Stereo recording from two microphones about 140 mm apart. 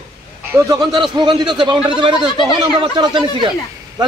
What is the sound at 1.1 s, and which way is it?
A man's voice, 35° right (ahead or behind).